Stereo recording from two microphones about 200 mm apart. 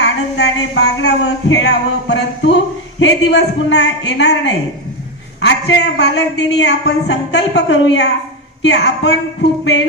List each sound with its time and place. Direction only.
0.0 s a woman's voice: 60° left (ahead or behind)